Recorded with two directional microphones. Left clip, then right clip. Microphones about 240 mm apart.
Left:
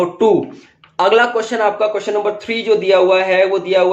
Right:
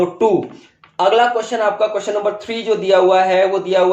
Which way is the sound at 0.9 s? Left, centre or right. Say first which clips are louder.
Left 1 dB; left.